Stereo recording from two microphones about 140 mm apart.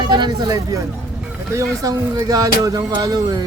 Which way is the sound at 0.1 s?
30° right (ahead or behind).